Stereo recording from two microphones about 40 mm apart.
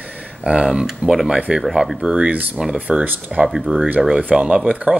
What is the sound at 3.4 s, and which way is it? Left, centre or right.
Speech, centre.